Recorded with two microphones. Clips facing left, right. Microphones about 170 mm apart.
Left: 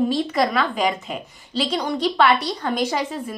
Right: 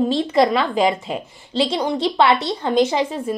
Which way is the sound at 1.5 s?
25° right (ahead or behind).